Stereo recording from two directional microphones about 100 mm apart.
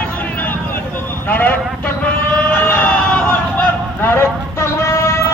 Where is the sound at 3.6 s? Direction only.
20° left (ahead or behind).